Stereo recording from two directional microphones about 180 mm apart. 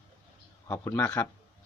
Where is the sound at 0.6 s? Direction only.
10° left (ahead or behind).